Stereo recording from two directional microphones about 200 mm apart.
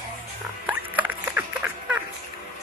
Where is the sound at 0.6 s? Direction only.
10° right (ahead or behind).